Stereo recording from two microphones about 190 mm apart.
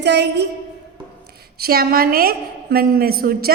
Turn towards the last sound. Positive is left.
turn(degrees=-50)  # may be behind; listen again after turning